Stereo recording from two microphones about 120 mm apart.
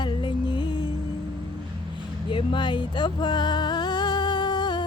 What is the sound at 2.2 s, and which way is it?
Music, 40° left (ahead or behind).